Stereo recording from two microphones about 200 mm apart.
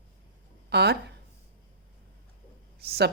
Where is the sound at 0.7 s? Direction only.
55° right (ahead or behind).